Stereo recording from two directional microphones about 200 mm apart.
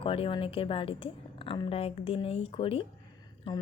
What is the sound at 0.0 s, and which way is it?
Speech, 25° left (ahead or behind).